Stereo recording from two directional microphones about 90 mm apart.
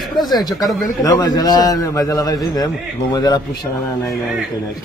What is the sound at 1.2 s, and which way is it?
A man's voice, 45° left (ahead or behind).